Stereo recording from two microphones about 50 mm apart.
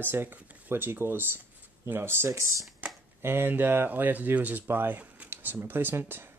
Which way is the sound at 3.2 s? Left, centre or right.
Right.